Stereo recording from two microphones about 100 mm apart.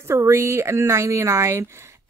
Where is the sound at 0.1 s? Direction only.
30° right (ahead or behind).